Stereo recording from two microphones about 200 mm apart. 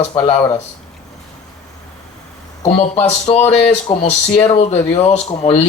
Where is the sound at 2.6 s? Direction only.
35° left (ahead or behind).